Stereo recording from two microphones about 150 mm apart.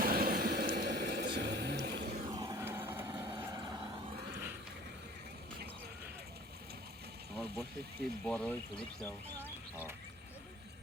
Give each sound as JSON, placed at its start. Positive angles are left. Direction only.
{"t": 0.0, "sound": "vehicle", "side_deg": -85}
{"t": 0.8, "sound": "a sound", "side_deg": -90}
{"t": 2.2, "sound": "vehicle", "side_deg": -25}
{"t": 3.5, "sound": "vehicle", "side_deg": -30}
{"t": 8.2, "sound": "speech", "side_deg": 10}